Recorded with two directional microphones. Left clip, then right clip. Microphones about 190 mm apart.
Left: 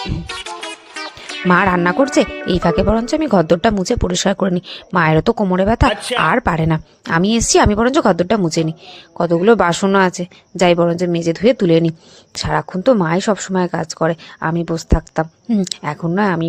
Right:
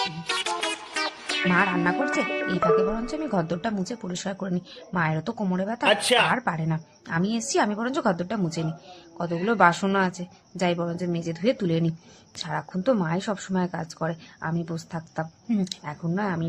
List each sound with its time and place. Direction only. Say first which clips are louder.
0.0 s music: left 1 dB; centre (ahead or behind)
1.5 s speech: left 10 dB; 55° left (ahead or behind)
2.2 s speech: left 5 dB; centre (ahead or behind)
2.6 s speech: left 7 dB; 50° left (ahead or behind)
5.8 s speech: left 5 dB; centre (ahead or behind)
6.3 s speech: left 11 dB; 50° left (ahead or behind)